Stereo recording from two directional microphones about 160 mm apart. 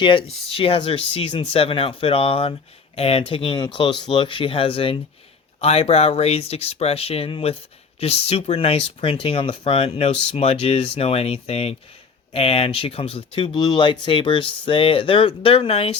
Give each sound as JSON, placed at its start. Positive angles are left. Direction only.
{"t": 0.0, "sound": "speech", "side_deg": 30}